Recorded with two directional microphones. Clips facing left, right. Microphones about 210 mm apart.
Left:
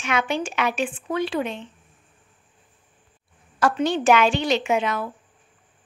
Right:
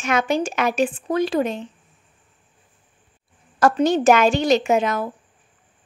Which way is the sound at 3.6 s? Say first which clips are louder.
Right 4 dB; 45° right (ahead or behind).